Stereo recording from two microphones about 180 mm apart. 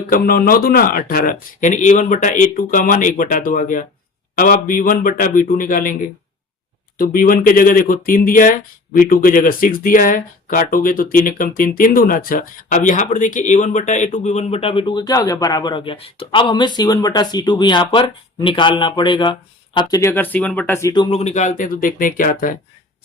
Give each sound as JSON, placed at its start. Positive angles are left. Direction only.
{"t": 0.1, "sound": "speech", "side_deg": 55}
{"t": 7.0, "sound": "speech", "side_deg": 50}
{"t": 21.2, "sound": "speech", "side_deg": 40}